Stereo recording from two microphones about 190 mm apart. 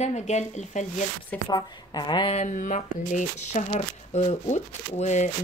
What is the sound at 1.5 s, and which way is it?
Speech, 25° left (ahead or behind).